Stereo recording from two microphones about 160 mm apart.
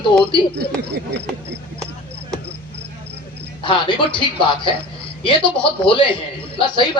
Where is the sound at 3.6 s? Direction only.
30° left (ahead or behind).